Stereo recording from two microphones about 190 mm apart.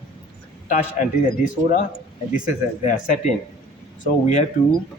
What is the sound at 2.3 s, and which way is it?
Speech, 45° left (ahead or behind).